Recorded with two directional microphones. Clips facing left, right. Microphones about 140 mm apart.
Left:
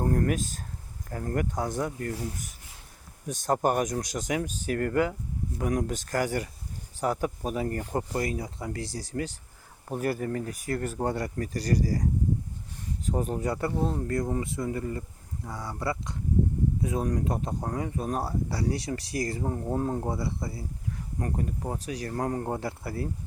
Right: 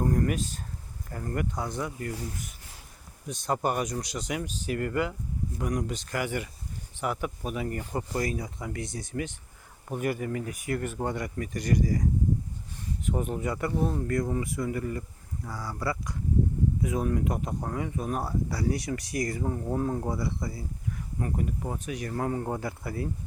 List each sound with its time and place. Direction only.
0.0 s a sound: 55° left (ahead or behind)
1.1 s speech: 55° left (ahead or behind)
3.2 s speech: 45° left (ahead or behind)
13.1 s speech: 35° left (ahead or behind)
21.2 s speech: 40° left (ahead or behind)